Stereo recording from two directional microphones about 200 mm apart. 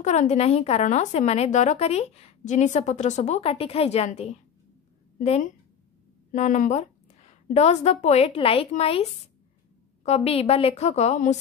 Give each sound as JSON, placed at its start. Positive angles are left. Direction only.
{"t": 0.0, "sound": "a woman's voice", "side_deg": 35}